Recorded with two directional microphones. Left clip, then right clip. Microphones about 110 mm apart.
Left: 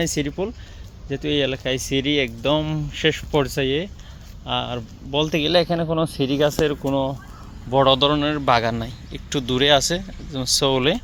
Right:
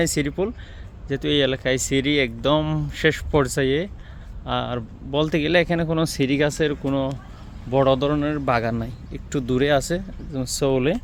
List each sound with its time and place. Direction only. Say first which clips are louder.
0.0 s speech: right 1 dB; 35° right (ahead or behind)
6.8 s speech: left 2 dB; 10° right (ahead or behind)